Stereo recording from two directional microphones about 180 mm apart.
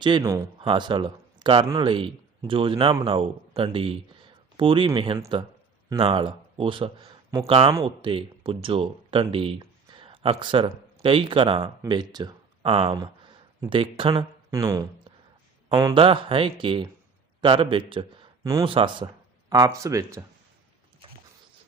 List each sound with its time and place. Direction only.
0.0 s a man's voice: 20° right (ahead or behind)